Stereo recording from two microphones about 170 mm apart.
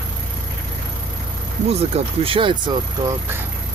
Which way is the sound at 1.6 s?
40° right (ahead or behind).